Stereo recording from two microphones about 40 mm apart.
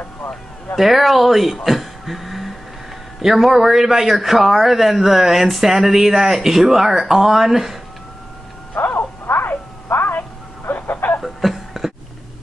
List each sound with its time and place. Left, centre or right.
0.7 s a man's voice: centre
8.7 s radio: left
11.2 s a sound: centre